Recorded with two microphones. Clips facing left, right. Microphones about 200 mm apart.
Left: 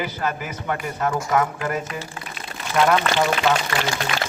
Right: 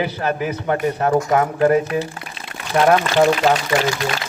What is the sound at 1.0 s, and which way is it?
Speech, 40° right (ahead or behind).